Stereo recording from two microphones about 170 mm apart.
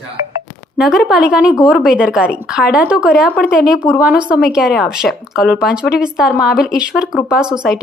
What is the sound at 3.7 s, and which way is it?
Speech, 20° left (ahead or behind).